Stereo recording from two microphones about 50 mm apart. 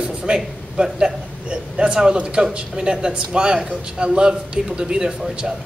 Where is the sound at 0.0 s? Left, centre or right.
Centre.